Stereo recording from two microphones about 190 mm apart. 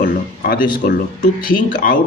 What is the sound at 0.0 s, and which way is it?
A man's voice, 45° left (ahead or behind).